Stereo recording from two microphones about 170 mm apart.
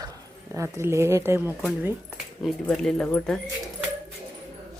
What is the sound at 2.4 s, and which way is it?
Speech, centre (ahead or behind).